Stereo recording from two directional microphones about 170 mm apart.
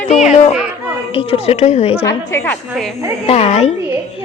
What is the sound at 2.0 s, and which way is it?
Speech, 15° left (ahead or behind).